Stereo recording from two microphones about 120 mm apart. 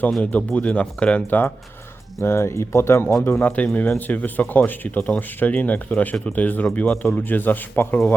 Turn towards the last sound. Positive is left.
turn(degrees=15)  # may be behind; listen again after turning